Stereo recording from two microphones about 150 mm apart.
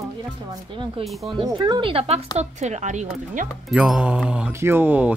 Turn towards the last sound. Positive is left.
turn(degrees=-10)  # may be behind; listen again after turning